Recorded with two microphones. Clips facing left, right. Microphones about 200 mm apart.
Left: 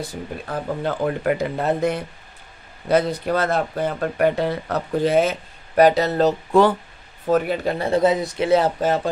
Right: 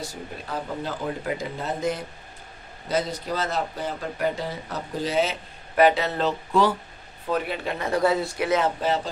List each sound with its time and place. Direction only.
0.0 s speech: 60° left (ahead or behind); by 8.0 s 35° left (ahead or behind)
8.0 s speech: 20° left (ahead or behind)
8.5 s speech: 35° left (ahead or behind)